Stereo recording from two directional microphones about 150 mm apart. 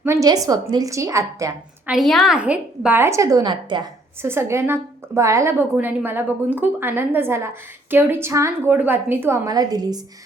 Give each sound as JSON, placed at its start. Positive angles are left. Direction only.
{"t": 0.0, "sound": "a woman's voice", "side_deg": -20}
{"t": 1.9, "sound": "a woman's voice", "side_deg": 0}
{"t": 4.2, "sound": "a woman's voice", "side_deg": -15}